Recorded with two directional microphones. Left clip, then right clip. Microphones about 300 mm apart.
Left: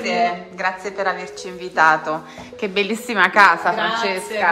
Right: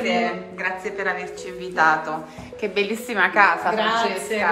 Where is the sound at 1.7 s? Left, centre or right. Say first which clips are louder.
Left 3 dB; left.